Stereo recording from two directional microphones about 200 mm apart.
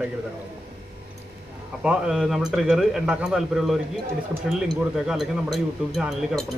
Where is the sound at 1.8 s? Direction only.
5° right (ahead or behind).